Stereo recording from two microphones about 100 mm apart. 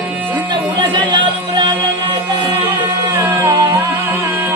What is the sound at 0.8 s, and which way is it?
Music, 50° right (ahead or behind).